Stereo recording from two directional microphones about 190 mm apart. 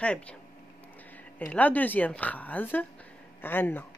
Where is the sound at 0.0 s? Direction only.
5° left (ahead or behind).